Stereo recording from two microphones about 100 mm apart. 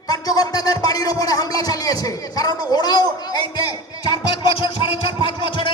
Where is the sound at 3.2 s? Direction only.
45° left (ahead or behind).